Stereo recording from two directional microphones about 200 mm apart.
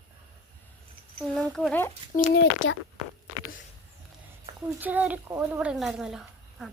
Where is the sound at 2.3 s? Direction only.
70° left (ahead or behind).